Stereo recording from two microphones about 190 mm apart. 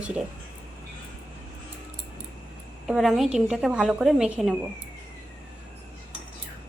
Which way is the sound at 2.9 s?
Centre (ahead or behind).